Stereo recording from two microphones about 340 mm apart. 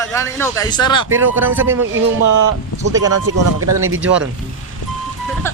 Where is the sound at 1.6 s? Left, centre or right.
Right.